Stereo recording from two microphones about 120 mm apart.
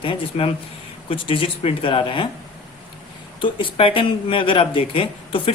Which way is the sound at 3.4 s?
45° left (ahead or behind).